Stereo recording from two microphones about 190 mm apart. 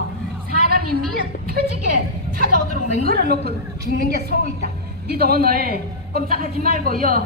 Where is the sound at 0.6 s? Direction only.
55° right (ahead or behind).